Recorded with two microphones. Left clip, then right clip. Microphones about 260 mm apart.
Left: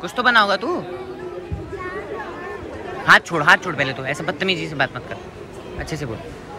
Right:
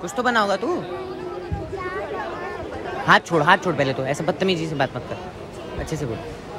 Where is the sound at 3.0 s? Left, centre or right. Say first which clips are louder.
Left 3 dB; centre.